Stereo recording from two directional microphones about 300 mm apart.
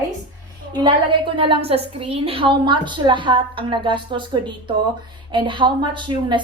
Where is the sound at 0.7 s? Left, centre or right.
Centre.